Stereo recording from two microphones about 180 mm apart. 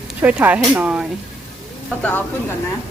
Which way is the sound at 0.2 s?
10° right (ahead or behind).